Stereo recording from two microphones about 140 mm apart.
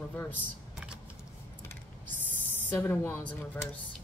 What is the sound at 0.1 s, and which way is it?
Speech, 15° left (ahead or behind).